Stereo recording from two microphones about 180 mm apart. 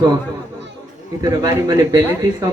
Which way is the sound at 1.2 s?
20° right (ahead or behind).